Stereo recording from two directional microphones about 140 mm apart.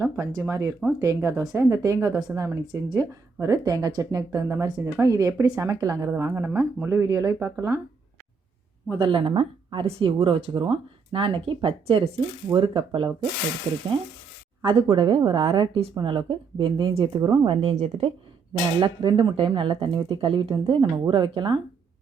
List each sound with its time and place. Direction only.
0.0 s speech: 20° right (ahead or behind)
8.9 s speech: 35° right (ahead or behind)
14.6 s speech: 35° right (ahead or behind)
18.8 s speech: 35° right (ahead or behind)